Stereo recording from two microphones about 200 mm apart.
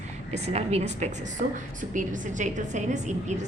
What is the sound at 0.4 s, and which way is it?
A woman's voice, 35° right (ahead or behind).